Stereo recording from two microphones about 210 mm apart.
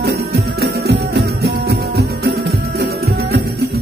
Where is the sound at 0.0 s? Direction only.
50° right (ahead or behind).